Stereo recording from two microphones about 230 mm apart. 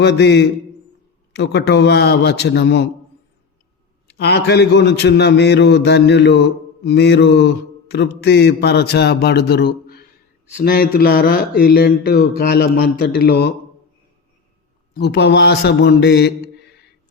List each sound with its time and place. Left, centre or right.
0.0 s mantra: left
4.2 s mantra: left
14.9 s mantra: left